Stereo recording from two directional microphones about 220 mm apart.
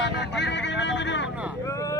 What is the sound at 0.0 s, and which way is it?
Vehicle, 55° left (ahead or behind).